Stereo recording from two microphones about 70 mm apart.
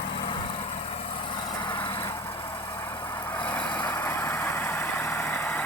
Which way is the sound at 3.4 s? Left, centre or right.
Left.